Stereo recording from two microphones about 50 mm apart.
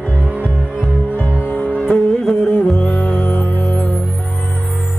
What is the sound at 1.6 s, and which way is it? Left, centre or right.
Music, left.